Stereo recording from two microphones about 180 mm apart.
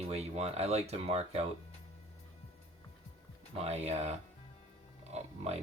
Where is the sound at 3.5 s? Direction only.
35° right (ahead or behind).